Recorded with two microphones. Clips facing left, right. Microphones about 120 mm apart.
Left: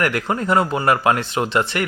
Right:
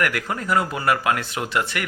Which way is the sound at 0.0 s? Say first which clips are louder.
Left 4 dB; 30° left (ahead or behind).